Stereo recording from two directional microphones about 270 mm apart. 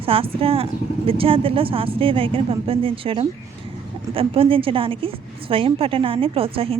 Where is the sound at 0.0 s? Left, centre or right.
Right.